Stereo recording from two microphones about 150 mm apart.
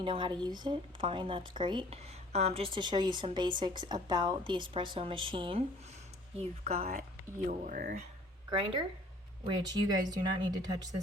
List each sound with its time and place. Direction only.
0.0 s speech: 35° right (ahead or behind)
6.9 s speech: 55° right (ahead or behind); by 7.9 s 80° right
8.4 s speech: 35° right (ahead or behind)